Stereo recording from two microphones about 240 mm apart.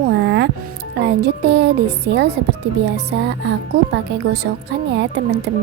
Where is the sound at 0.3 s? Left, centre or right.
Right.